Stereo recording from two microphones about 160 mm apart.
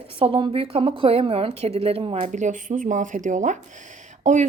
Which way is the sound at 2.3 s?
50° right (ahead or behind).